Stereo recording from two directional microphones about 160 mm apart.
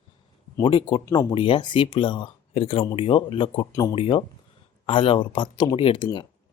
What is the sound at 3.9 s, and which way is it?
Speech, 35° left (ahead or behind).